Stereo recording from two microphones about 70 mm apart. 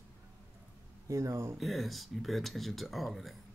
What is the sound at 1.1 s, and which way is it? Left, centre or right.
Speech, right.